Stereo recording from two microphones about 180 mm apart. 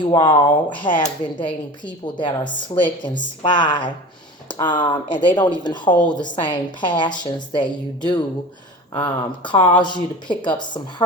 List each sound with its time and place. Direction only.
0.0 s a woman's voice: 20° left (ahead or behind)